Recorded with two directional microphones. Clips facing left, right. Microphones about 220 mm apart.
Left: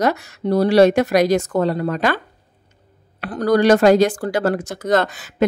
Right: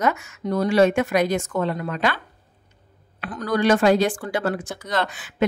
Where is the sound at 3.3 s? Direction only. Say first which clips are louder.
Left 6 dB; 35° left (ahead or behind).